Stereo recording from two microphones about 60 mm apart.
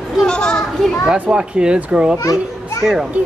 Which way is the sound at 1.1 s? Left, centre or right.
Centre.